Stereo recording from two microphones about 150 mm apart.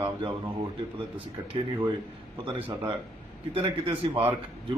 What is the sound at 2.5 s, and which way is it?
Speech, 35° right (ahead or behind).